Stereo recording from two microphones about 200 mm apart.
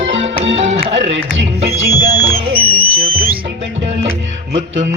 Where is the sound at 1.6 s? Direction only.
30° right (ahead or behind).